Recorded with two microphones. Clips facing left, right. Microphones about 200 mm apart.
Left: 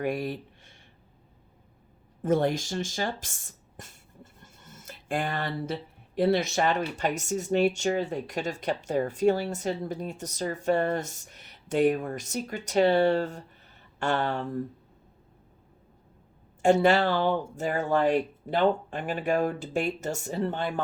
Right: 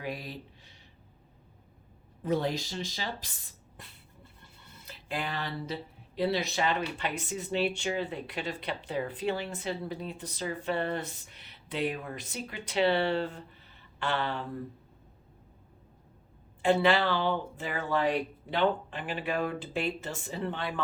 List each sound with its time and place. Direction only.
0.0 s speech: 50° left (ahead or behind)
2.2 s a sound: 50° left (ahead or behind)
6.1 s speech: 50° left (ahead or behind)
16.6 s speech: 45° left (ahead or behind)